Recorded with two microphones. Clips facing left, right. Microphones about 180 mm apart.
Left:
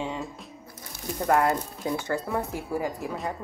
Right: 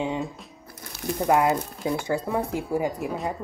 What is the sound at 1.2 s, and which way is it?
Speech, 15° right (ahead or behind).